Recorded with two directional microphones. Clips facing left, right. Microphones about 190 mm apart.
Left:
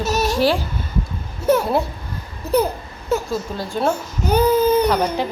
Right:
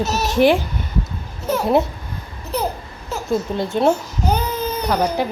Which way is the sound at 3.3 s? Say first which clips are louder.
Right 4 dB; 20° right (ahead or behind).